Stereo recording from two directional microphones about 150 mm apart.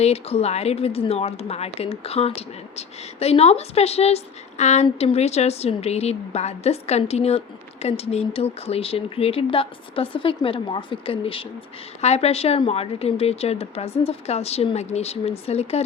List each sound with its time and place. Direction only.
0.0 s a woman's voice: 45° left (ahead or behind)